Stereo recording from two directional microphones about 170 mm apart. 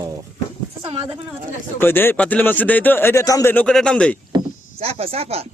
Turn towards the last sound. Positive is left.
turn(degrees=-35)  # may be behind; listen again after turning